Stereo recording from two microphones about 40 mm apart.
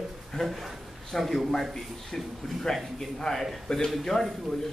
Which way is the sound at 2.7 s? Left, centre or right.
Centre.